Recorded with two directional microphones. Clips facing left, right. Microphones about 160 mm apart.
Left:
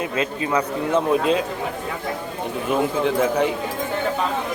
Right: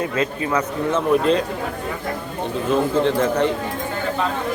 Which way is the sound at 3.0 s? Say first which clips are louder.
Right 1 dB; 10° left (ahead or behind).